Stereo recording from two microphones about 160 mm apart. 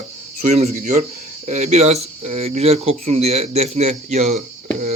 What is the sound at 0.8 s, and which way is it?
Speech, 55° right (ahead or behind).